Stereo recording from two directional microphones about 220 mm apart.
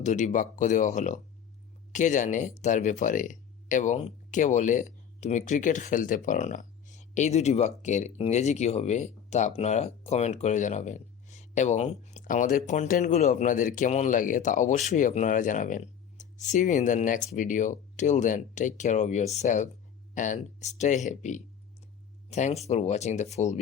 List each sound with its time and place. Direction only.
0.0 s speech: 35° left (ahead or behind)